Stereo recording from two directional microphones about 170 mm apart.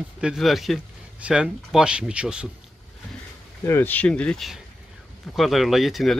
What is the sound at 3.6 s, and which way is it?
Speech, 15° left (ahead or behind).